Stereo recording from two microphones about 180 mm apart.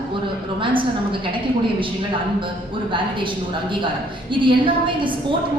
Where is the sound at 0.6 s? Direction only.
30° right (ahead or behind).